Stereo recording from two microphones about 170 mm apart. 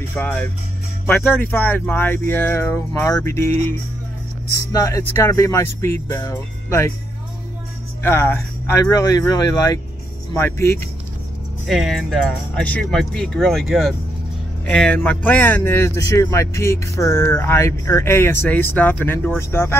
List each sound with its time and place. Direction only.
0.1 s speech: 10° left (ahead or behind)
4.7 s speech: 20° left (ahead or behind)
8.0 s speech: 15° left (ahead or behind)
11.6 s speech: centre (ahead or behind)